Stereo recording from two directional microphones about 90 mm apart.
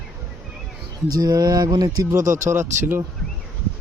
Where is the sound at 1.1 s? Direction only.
45° right (ahead or behind).